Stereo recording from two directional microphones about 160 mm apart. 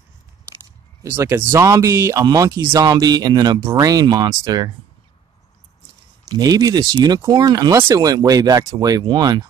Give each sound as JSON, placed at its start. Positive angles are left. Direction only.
{"t": 1.0, "sound": "speech", "side_deg": -15}
{"t": 6.2, "sound": "speech", "side_deg": -25}